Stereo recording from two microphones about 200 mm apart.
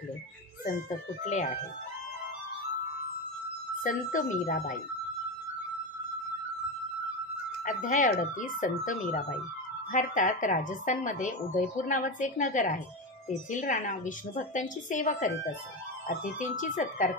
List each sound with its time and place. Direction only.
0.8 s a woman's voice: 40° left (ahead or behind)
3.8 s a woman's voice: 40° left (ahead or behind)
7.6 s a woman's voice: 40° left (ahead or behind)